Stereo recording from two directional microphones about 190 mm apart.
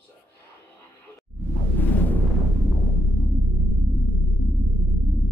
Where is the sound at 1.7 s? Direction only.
10° left (ahead or behind).